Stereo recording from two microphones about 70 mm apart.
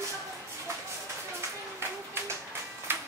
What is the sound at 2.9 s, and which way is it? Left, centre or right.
Music, right.